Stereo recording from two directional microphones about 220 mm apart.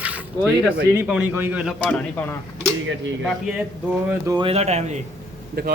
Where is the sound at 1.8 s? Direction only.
5° left (ahead or behind).